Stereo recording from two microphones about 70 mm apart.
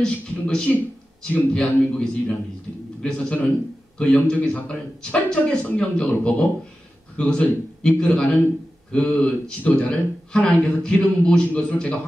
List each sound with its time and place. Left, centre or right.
0.0 s a man's voice: centre